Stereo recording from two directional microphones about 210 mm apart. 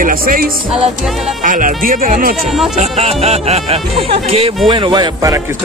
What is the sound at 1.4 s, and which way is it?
Speech, 40° right (ahead or behind).